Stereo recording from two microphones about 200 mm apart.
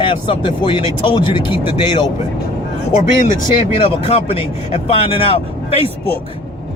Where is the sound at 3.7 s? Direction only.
30° left (ahead or behind).